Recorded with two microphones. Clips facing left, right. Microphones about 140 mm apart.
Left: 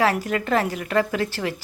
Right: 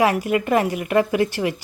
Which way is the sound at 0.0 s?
15° right (ahead or behind).